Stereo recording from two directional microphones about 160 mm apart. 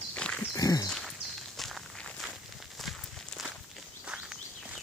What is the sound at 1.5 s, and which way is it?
Walk, centre (ahead or behind).